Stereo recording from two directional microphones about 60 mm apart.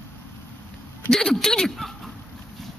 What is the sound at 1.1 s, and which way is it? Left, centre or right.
Speech, centre.